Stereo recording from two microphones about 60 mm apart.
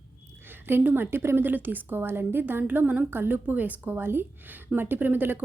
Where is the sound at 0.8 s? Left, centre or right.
Right.